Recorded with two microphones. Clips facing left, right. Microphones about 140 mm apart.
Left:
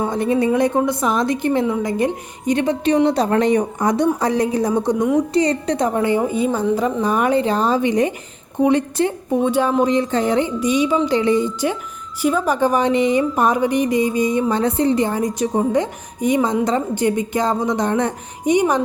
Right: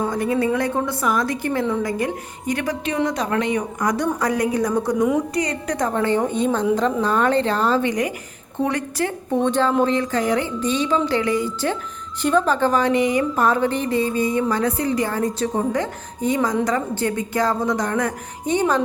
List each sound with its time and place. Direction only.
0.0 s a woman's voice: 25° left (ahead or behind)
4.9 s a woman's voice: centre (ahead or behind)
5.3 s a woman's voice: 30° left (ahead or behind)
5.9 s a woman's voice: 10° left (ahead or behind)
9.4 s a woman's voice: 10° left (ahead or behind)
10.6 s a woman's voice: 10° left (ahead or behind)
11.2 s a woman's voice: 25° left (ahead or behind)